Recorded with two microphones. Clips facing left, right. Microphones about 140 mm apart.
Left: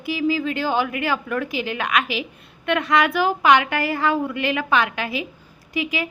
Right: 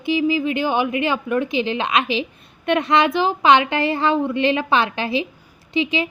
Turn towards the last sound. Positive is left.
turn(degrees=-25)  # may be behind; listen again after turning